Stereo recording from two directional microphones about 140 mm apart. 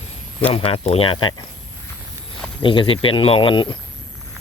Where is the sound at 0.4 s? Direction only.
45° left (ahead or behind).